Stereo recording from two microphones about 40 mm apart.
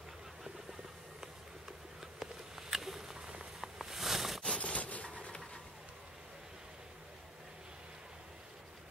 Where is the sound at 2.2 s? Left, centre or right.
Centre.